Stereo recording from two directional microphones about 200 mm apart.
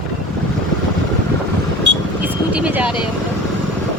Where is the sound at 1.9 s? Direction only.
65° right (ahead or behind).